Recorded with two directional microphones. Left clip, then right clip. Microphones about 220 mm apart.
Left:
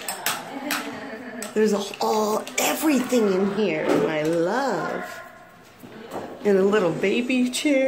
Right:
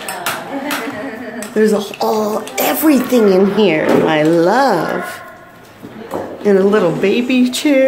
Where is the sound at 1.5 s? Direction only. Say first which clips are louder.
Right 8 dB; 5° left (ahead or behind).